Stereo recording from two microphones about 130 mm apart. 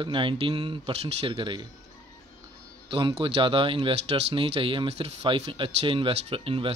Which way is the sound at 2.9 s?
40° right (ahead or behind).